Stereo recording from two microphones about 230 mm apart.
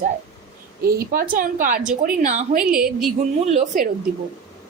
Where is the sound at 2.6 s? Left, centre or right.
Centre.